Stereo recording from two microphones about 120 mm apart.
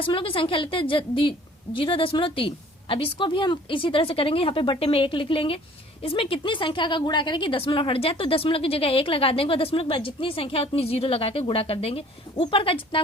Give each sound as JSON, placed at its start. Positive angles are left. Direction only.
{"t": 0.0, "sound": "a woman's voice", "side_deg": 45}